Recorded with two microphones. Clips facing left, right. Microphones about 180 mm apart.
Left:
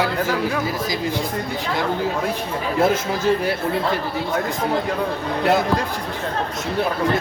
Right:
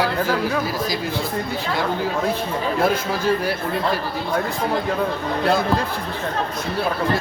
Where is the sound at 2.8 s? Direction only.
20° left (ahead or behind).